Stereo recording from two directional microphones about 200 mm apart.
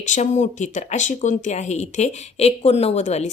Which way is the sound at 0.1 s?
35° left (ahead or behind).